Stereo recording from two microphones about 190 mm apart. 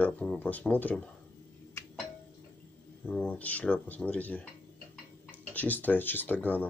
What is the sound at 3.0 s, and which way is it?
Speech, 5° left (ahead or behind).